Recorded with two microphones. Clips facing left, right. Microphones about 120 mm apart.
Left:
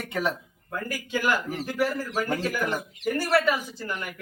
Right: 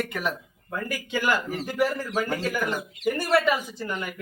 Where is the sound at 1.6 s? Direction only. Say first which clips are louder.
Right 1 dB; 15° right (ahead or behind).